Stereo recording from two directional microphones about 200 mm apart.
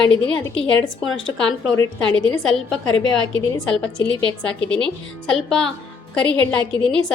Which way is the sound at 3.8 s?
5° left (ahead or behind).